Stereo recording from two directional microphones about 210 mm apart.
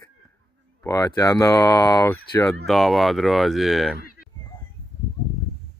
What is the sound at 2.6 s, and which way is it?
Speech, centre (ahead or behind).